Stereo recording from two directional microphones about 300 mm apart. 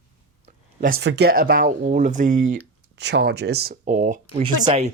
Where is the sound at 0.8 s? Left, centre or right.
Right.